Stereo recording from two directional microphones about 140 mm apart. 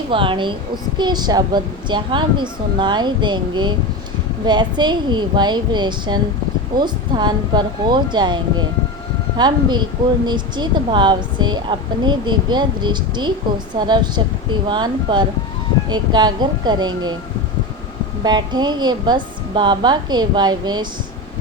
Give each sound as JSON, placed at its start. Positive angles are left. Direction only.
{"t": 0.1, "sound": "a woman's voice", "side_deg": -35}
{"t": 18.2, "sound": "a woman's voice", "side_deg": -30}